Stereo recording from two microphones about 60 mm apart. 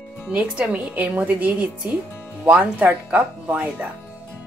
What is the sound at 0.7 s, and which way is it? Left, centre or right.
Speech, right.